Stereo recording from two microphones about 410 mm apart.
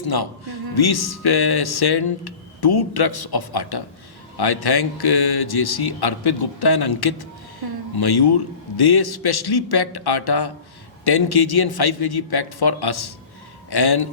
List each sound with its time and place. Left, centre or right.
0.1 s a man's voice: left